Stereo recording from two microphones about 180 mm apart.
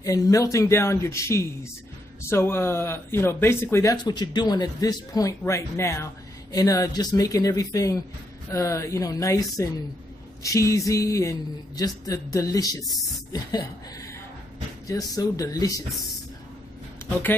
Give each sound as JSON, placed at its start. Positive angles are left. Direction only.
{"t": 0.0, "sound": "speech", "side_deg": 20}
{"t": 14.9, "sound": "speech", "side_deg": 20}
{"t": 15.9, "sound": "speech", "side_deg": 0}